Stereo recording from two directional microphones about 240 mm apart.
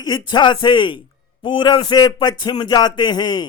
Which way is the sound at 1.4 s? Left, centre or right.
Centre.